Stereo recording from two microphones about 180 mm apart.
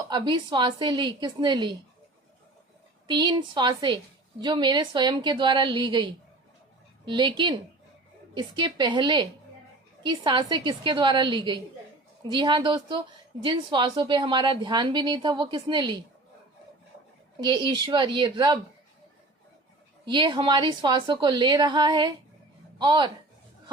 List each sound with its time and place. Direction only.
0.1 s a woman's voice: 25° right (ahead or behind)
3.1 s a woman's voice: 25° right (ahead or behind)
17.4 s a woman's voice: 25° right (ahead or behind)
20.1 s a woman's voice: 25° right (ahead or behind)